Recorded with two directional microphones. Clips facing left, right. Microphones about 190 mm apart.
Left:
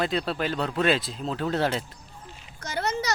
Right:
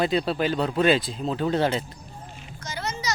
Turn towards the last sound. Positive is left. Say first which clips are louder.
# left 4 dB
turn(degrees=60)  # may be behind; listen again after turning